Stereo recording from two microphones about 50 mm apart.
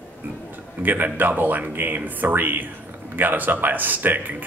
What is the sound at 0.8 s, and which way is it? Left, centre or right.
Speech, right.